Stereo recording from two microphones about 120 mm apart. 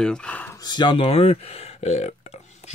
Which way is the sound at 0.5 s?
40° left (ahead or behind).